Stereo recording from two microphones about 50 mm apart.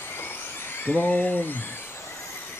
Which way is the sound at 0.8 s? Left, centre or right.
Left.